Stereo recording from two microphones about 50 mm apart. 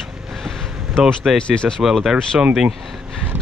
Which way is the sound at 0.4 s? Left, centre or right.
Centre.